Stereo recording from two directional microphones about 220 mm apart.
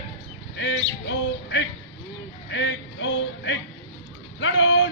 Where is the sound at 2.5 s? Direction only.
55° left (ahead or behind).